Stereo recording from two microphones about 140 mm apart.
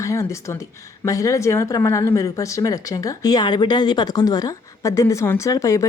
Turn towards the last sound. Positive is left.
turn(degrees=25)  # may be behind; listen again after turning